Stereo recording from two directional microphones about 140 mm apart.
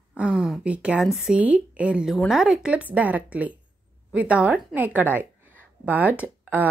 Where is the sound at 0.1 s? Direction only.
5° right (ahead or behind).